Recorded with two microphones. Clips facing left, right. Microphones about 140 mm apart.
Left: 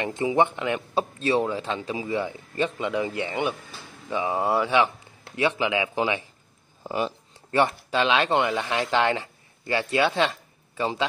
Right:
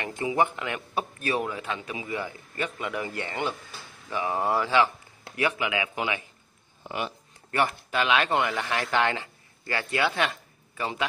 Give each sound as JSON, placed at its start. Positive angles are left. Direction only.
{"t": 0.0, "sound": "speech", "side_deg": 20}